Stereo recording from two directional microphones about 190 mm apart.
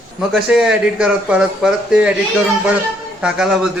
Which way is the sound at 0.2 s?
Centre (ahead or behind).